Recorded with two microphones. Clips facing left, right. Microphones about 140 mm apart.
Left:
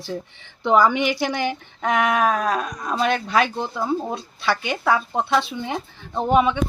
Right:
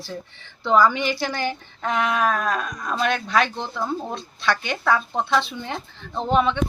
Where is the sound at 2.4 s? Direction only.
Centre (ahead or behind).